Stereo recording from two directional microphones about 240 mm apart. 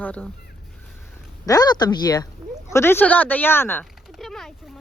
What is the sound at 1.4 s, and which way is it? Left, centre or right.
Speech, centre.